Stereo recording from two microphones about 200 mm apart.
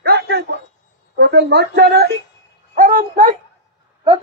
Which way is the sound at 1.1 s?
60° right (ahead or behind).